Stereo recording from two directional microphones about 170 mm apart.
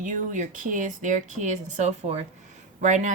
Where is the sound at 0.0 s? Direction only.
50° right (ahead or behind).